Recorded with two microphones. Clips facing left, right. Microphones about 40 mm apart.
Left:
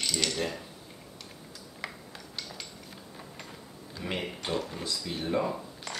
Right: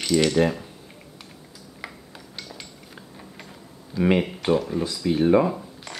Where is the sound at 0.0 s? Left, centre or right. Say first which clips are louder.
Right 11 dB; centre.